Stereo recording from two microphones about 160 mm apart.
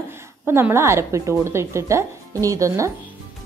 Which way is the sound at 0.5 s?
15° right (ahead or behind).